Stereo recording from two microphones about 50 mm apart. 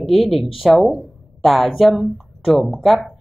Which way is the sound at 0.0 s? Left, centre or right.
Centre.